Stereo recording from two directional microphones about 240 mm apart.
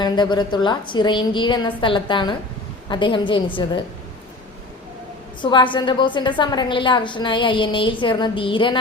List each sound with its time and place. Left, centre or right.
0.0 s a woman's voice: centre
5.4 s a woman's voice: centre